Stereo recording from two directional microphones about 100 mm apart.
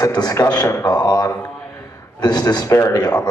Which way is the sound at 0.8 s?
45° left (ahead or behind).